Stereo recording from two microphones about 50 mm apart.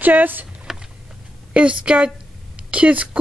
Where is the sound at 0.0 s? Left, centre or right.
Right.